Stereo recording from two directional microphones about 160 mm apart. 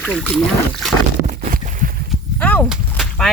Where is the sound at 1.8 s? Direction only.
55° right (ahead or behind).